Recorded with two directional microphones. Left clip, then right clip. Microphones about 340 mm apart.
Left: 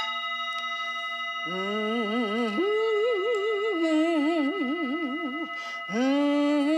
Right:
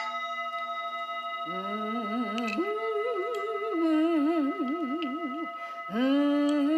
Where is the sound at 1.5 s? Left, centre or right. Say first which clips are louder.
Left 5 dB; left.